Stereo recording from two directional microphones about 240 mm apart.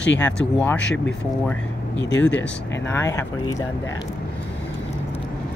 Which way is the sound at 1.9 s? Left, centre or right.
Left.